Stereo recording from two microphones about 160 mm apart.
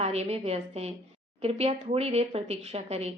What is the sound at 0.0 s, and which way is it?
A woman's voice, 40° right (ahead or behind).